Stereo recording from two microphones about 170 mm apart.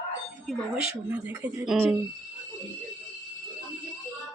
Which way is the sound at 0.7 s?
30° left (ahead or behind).